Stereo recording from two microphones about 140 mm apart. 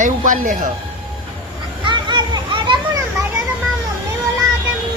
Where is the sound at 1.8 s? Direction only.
35° right (ahead or behind).